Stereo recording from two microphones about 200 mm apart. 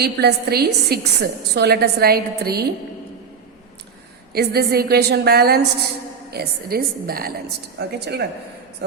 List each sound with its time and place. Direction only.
0.0 s a woman's voice: 55° right (ahead or behind)
4.3 s a woman's voice: 50° right (ahead or behind)